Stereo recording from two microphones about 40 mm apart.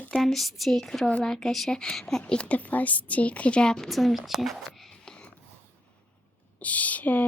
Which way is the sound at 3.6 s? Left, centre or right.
Centre.